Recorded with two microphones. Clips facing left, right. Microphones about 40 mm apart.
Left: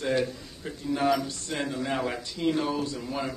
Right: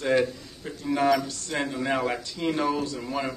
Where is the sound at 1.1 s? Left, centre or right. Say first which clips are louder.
Right 3 dB; centre.